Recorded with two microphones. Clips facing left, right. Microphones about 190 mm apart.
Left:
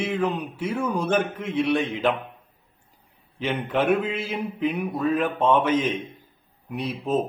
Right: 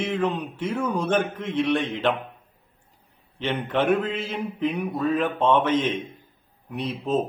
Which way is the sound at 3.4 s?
10° left (ahead or behind).